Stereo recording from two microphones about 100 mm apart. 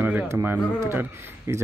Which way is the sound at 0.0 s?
20° right (ahead or behind).